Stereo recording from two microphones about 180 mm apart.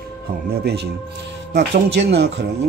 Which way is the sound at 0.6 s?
70° right (ahead or behind).